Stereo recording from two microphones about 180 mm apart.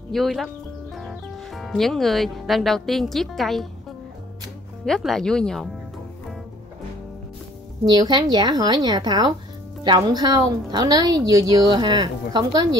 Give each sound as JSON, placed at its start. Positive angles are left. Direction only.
{"t": 0.1, "sound": "speech", "side_deg": 0}
{"t": 4.8, "sound": "speech", "side_deg": 0}
{"t": 7.9, "sound": "a woman's voice", "side_deg": -25}